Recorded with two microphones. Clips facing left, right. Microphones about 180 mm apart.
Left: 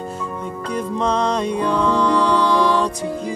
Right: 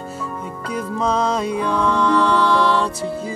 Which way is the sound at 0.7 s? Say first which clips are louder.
Even; 5° right (ahead or behind).